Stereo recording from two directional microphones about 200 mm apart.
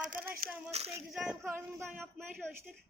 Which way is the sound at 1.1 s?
Centre (ahead or behind).